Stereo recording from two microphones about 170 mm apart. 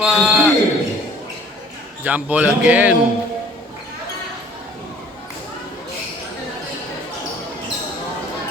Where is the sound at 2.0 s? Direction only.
10° right (ahead or behind).